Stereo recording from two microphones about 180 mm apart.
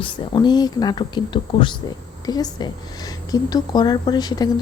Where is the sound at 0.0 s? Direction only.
25° left (ahead or behind).